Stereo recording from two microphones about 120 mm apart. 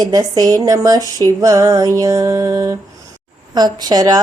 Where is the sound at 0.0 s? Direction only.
30° right (ahead or behind).